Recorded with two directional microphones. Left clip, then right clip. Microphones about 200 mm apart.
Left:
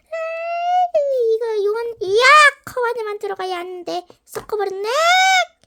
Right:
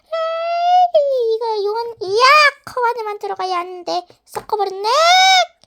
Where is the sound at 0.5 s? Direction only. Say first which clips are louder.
Right 4 dB; 45° right (ahead or behind).